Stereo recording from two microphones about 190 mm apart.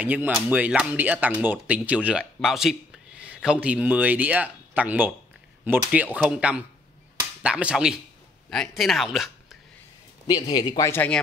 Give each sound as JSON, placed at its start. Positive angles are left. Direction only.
{"t": 0.0, "sound": "speech", "side_deg": -10}
{"t": 6.2, "sound": "speech", "side_deg": -5}
{"t": 10.2, "sound": "speech", "side_deg": 20}